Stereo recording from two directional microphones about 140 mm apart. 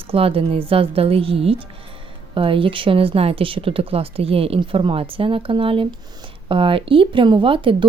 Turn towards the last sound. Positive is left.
turn(degrees=-40)  # may be behind; listen again after turning